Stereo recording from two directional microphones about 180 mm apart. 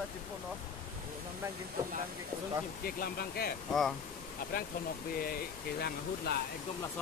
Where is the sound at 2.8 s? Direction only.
55° left (ahead or behind).